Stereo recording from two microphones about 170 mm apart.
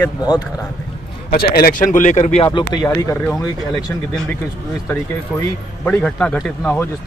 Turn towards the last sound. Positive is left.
turn(degrees=5)  # may be behind; listen again after turning